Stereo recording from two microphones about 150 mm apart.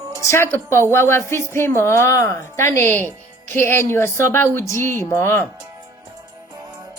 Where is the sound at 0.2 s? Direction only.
15° left (ahead or behind).